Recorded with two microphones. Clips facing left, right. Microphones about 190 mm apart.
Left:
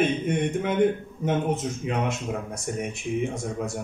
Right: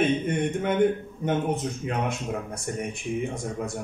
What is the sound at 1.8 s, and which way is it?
Speech, 5° left (ahead or behind).